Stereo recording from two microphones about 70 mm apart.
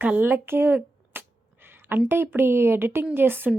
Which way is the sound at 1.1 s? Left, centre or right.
Right.